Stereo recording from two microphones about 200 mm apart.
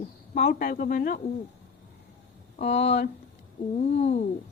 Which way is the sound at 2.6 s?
30° left (ahead or behind).